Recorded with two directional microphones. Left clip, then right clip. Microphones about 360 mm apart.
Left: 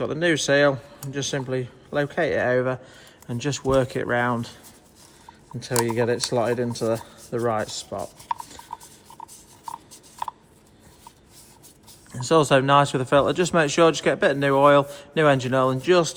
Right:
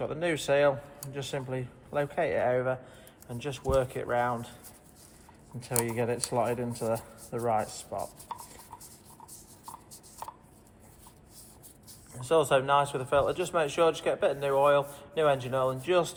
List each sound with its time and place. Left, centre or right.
0.0 s speech: left
5.5 s speech: left
12.2 s speech: left